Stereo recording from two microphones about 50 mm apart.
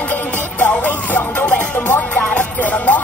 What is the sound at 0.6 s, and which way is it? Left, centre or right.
Music, left.